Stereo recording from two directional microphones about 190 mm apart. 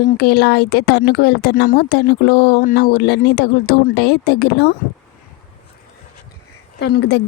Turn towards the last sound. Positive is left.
turn(degrees=60)  # may be behind; listen again after turning